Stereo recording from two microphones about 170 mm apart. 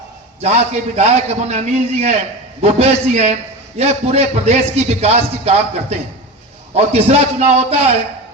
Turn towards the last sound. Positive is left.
turn(degrees=-40)  # may be behind; listen again after turning